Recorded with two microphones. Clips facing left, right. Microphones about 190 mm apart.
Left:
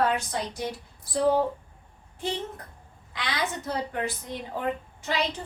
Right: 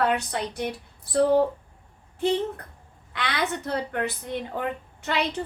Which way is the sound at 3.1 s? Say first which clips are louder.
Right 3 dB; 60° right (ahead or behind).